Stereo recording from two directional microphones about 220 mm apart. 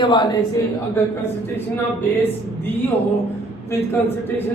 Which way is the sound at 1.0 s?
10° left (ahead or behind).